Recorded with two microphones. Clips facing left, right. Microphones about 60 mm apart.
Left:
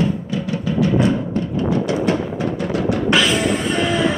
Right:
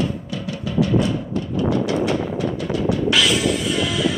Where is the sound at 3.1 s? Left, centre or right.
Left.